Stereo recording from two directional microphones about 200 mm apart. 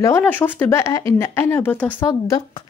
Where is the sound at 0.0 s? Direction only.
10° left (ahead or behind).